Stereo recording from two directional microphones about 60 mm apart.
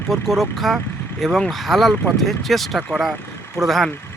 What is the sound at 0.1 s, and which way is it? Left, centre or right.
Speech, centre.